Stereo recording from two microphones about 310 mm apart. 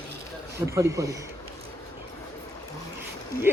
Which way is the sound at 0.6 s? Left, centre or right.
Centre.